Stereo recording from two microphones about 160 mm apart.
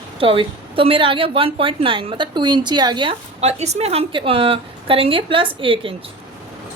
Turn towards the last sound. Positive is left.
turn(degrees=-35)  # may be behind; listen again after turning